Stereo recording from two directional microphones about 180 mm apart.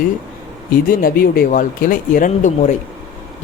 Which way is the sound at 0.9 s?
50° left (ahead or behind).